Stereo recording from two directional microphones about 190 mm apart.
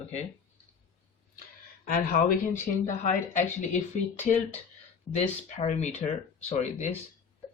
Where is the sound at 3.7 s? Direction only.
40° left (ahead or behind).